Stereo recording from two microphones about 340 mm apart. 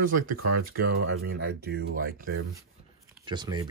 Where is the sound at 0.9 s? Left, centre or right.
Right.